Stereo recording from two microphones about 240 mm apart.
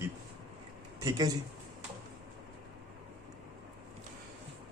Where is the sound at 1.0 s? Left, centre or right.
Centre.